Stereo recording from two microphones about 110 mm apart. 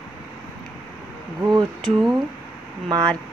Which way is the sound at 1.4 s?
40° right (ahead or behind).